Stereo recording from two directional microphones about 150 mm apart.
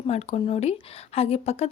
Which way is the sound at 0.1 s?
45° left (ahead or behind).